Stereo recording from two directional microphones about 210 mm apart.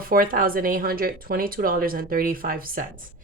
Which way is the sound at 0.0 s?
45° right (ahead or behind).